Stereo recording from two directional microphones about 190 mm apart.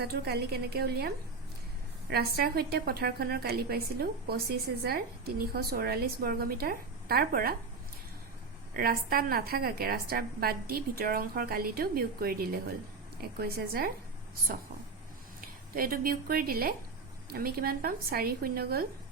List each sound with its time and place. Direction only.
0.0 s a woman's voice: 55° right (ahead or behind)
8.7 s a woman's voice: 50° right (ahead or behind)
15.4 s a woman's voice: 50° right (ahead or behind)